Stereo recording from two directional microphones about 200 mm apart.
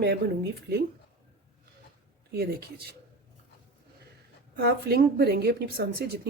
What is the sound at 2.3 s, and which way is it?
Speech, 50° right (ahead or behind).